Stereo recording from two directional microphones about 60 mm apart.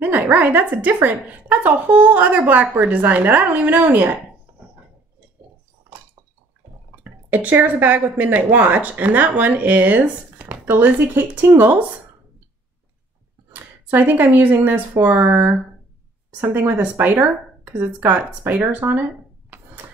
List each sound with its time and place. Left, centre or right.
0.0 s speech: right
7.0 s speech: right
13.6 s speech: right